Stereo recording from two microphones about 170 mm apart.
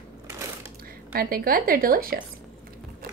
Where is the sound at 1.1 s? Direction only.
60° right (ahead or behind).